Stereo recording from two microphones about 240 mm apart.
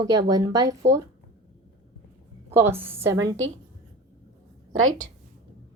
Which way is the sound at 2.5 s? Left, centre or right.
Centre.